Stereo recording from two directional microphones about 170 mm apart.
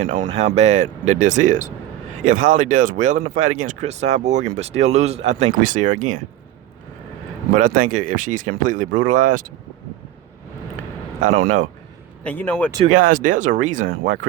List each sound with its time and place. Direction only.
0.5 s speech: 45° right (ahead or behind)
7.5 s speech: 50° right (ahead or behind)
11.2 s speech: 45° right (ahead or behind)
12.2 s speech: 10° left (ahead or behind)
12.9 s speech: 55° right (ahead or behind)